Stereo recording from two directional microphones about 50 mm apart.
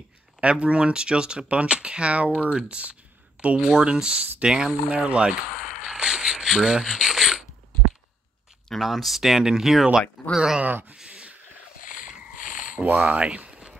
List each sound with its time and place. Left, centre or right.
0.4 s speech: right
5.5 s a sound: centre
8.6 s speech: centre
10.6 s speech: right
11.1 s a sound: right
12.7 s speech: right